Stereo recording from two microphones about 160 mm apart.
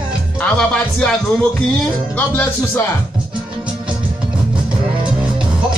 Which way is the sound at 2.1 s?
10° left (ahead or behind).